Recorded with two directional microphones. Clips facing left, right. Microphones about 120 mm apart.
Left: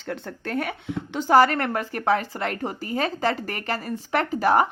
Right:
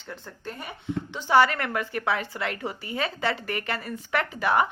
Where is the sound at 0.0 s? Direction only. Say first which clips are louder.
Left 6 dB; 85° left.